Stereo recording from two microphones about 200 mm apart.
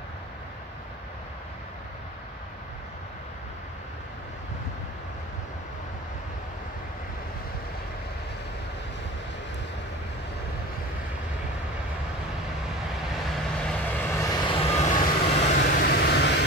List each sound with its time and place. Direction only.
13.4 s vehicle: 5° left (ahead or behind); by 15.6 s 35° left (ahead or behind)
15.6 s vehicle: 55° left (ahead or behind)